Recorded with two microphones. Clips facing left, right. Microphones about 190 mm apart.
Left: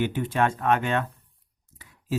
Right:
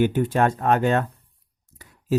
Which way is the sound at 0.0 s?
45° right (ahead or behind).